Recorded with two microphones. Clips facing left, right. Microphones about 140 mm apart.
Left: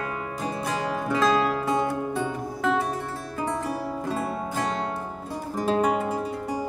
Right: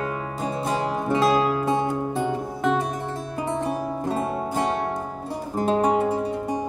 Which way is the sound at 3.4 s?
20° right (ahead or behind).